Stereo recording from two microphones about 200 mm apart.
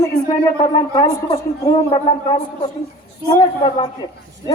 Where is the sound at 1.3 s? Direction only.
30° left (ahead or behind).